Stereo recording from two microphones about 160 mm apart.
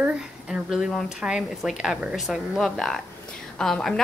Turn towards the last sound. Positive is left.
turn(degrees=5)  # may be behind; listen again after turning